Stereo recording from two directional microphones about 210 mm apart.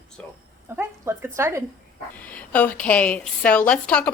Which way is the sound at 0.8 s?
10° right (ahead or behind).